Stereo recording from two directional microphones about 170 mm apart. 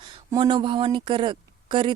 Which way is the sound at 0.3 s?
30° right (ahead or behind).